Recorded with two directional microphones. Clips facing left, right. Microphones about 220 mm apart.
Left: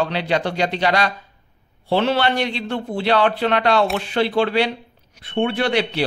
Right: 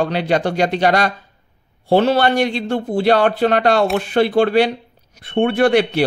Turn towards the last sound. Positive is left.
turn(degrees=-50)  # may be behind; listen again after turning